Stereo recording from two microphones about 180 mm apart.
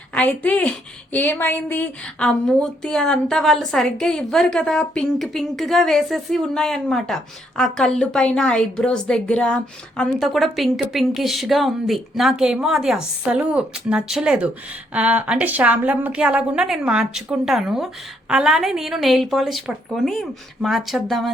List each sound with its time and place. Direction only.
0.1 s a woman's voice: 10° left (ahead or behind)